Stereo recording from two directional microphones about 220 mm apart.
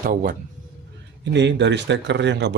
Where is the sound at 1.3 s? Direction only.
55° right (ahead or behind).